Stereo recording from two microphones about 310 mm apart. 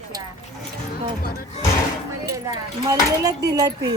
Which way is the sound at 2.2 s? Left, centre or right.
Centre.